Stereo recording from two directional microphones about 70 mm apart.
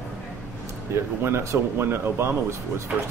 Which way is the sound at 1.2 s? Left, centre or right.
Right.